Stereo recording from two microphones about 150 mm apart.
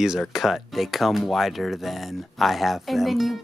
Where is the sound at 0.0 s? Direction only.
5° right (ahead or behind).